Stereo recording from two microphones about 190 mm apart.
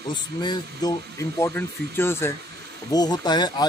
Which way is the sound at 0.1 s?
25° left (ahead or behind).